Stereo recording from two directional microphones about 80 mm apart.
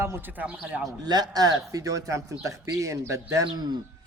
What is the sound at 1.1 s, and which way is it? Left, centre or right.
A man's voice, right.